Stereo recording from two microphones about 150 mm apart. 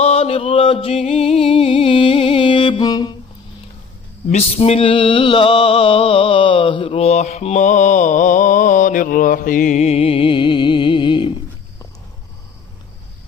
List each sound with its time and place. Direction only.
0.0 s music: 45° left (ahead or behind)
4.3 s mantra: 45° left (ahead or behind)